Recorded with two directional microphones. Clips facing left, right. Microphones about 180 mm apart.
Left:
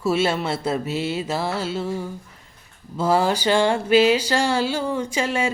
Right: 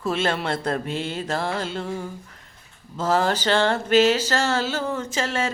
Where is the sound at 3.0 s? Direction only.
10° left (ahead or behind).